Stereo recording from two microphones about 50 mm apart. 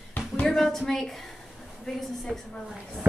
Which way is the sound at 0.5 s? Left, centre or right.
Centre.